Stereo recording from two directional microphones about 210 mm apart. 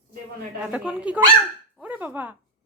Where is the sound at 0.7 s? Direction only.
5° right (ahead or behind).